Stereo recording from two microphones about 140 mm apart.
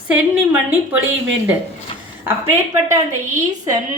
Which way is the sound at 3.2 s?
60° right (ahead or behind).